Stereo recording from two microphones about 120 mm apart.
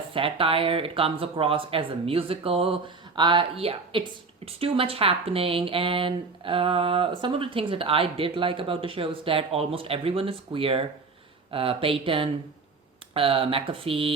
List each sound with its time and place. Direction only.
0.1 s speech: 50° right (ahead or behind)